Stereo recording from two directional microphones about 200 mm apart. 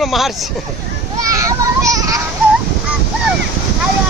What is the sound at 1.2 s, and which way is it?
Children playing, 15° right (ahead or behind).